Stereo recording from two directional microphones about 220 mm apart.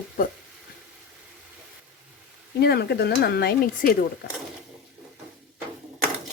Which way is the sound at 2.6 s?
50° left (ahead or behind).